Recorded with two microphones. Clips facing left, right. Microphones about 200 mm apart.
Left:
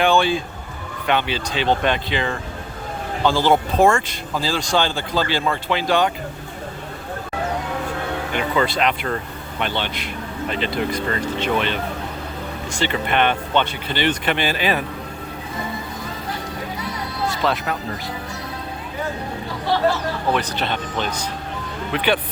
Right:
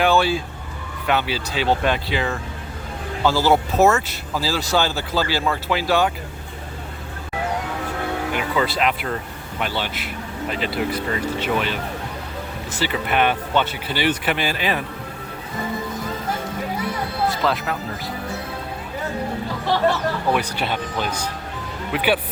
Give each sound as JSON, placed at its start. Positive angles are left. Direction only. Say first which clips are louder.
{"t": 0.0, "sound": "speech", "louder": "left 1 dB", "side_deg": -5}
{"t": 8.3, "sound": "speech", "louder": "left 3 dB", "side_deg": -5}
{"t": 14.5, "sound": "a man's voice", "louder": "left 2 dB", "side_deg": 90}
{"t": 20.3, "sound": "speech", "louder": "even", "side_deg": -10}